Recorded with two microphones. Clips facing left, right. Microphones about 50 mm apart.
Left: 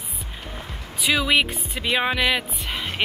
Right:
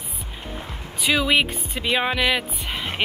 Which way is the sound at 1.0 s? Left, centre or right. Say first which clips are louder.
Right 1 dB; centre.